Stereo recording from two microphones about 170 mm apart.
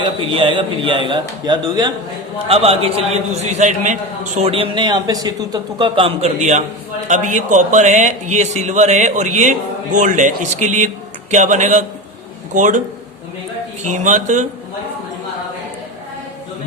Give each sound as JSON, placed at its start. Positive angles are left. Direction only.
{"t": 0.0, "sound": "a man's voice", "side_deg": -30}
{"t": 2.5, "sound": "a man's voice", "side_deg": -35}
{"t": 13.8, "sound": "a man's voice", "side_deg": -45}